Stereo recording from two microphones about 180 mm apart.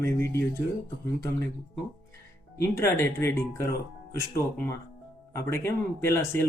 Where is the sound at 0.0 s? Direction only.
15° left (ahead or behind).